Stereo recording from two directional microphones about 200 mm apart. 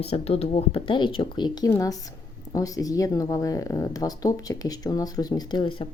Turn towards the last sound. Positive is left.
turn(degrees=25)  # may be behind; listen again after turning